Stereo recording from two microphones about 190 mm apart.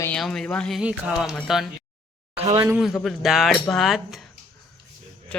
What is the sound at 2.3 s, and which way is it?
Speech, 30° right (ahead or behind).